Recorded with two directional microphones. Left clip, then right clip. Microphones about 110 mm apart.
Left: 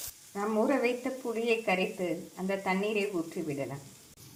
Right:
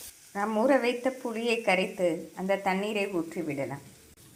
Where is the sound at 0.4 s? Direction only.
25° right (ahead or behind).